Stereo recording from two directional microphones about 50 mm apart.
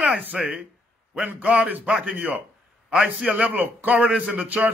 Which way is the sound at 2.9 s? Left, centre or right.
Centre.